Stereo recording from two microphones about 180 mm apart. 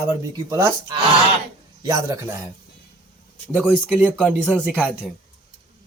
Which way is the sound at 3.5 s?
5° left (ahead or behind).